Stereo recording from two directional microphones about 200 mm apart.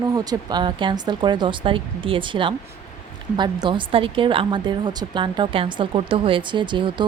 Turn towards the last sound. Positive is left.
turn(degrees=-25)  # may be behind; listen again after turning